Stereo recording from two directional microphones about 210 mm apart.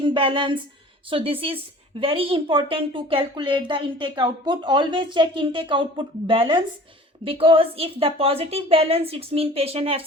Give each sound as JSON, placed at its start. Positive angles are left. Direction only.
{"t": 0.0, "sound": "a child's voice", "side_deg": -25}